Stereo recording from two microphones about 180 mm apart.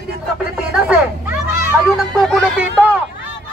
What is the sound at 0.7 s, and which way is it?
Children playing, 10° right (ahead or behind).